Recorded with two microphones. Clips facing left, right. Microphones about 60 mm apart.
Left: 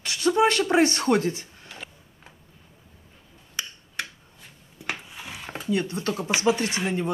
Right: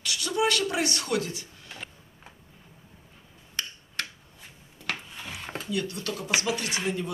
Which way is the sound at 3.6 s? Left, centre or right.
Centre.